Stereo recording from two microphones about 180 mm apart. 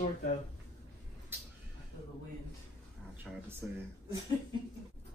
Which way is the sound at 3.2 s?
15° right (ahead or behind).